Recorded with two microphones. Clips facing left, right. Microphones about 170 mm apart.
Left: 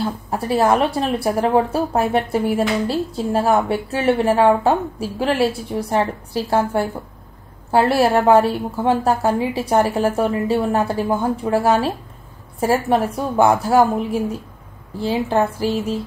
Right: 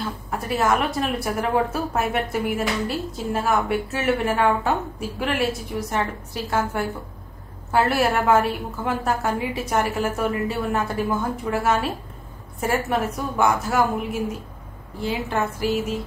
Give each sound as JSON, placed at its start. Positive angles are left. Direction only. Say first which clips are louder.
{"t": 0.0, "sound": "speech", "louder": "left 6 dB", "side_deg": 30}